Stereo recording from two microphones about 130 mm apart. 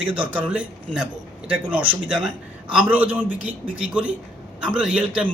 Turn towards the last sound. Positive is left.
turn(degrees=-5)  # may be behind; listen again after turning